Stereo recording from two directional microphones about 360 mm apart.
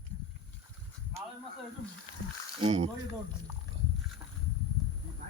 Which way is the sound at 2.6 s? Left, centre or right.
Centre.